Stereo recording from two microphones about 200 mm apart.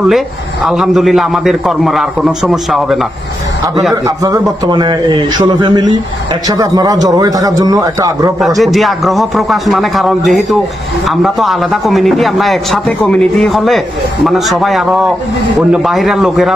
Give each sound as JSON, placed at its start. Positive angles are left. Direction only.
{"t": 0.7, "sound": "a man's voice", "side_deg": 0}
{"t": 4.2, "sound": "a man's voice", "side_deg": -15}
{"t": 8.4, "sound": "a man's voice", "side_deg": 0}